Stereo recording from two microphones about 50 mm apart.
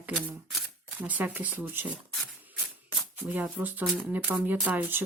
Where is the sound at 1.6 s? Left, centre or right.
Right.